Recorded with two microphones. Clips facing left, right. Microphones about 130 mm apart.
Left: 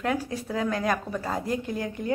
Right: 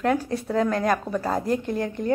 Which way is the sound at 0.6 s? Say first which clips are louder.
Right 2 dB; 40° right (ahead or behind).